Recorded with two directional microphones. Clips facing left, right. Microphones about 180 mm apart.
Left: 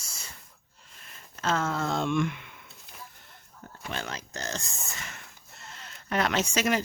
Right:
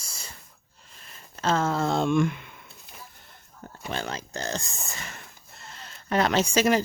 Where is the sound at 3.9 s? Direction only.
30° right (ahead or behind).